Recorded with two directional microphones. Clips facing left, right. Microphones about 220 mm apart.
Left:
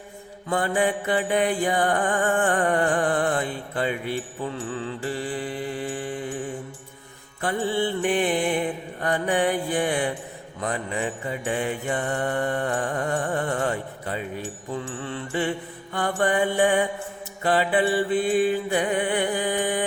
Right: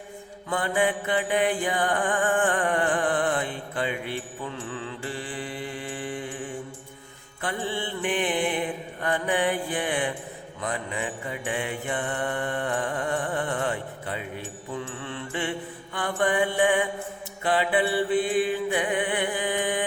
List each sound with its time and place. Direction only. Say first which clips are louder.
0.5 s mantra: left 2 dB; 40° left (ahead or behind)
7.4 s mantra: left 6 dB; 40° left (ahead or behind)